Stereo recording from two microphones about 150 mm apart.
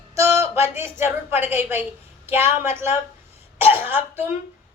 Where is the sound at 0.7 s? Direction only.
15° right (ahead or behind).